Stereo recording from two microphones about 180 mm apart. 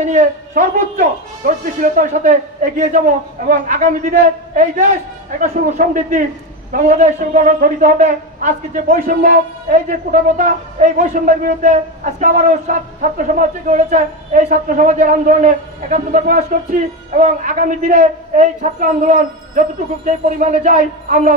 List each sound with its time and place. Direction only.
0.0 s a man's voice: 45° right (ahead or behind)